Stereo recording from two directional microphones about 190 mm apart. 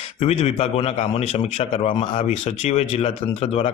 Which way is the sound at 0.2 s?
30° left (ahead or behind).